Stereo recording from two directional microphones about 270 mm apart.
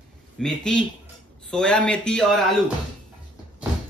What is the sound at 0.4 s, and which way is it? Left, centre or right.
Speech, centre.